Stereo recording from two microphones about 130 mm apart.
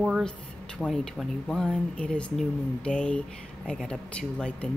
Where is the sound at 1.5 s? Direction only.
5° left (ahead or behind).